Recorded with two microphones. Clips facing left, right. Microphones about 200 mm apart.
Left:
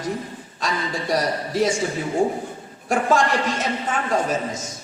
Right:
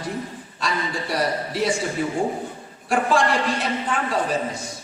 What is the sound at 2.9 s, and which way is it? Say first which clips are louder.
Speech: left 1 dB; 45° left (ahead or behind).